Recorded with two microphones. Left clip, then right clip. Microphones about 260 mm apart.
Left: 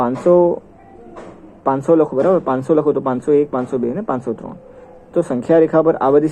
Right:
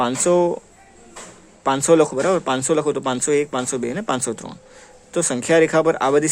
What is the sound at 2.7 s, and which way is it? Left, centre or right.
Speech, right.